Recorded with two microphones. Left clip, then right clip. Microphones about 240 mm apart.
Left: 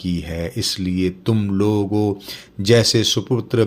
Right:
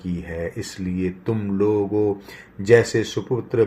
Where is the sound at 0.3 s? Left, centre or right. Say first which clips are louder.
Left 4 dB; left.